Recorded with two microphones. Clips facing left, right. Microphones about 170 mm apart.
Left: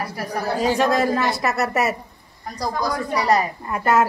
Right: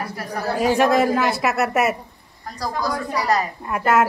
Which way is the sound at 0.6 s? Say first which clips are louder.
Right 3 dB; 5° right (ahead or behind).